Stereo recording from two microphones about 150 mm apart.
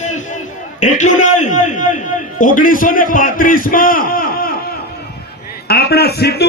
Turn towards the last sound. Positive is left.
turn(degrees=90)